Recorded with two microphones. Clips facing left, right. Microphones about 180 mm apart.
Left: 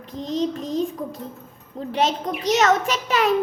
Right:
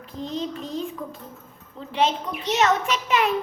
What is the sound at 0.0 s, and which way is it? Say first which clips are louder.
Child singing: left 5 dB; 40° left (ahead or behind).